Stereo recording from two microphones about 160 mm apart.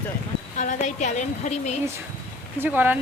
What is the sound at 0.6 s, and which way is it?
A woman's voice, 50° left (ahead or behind).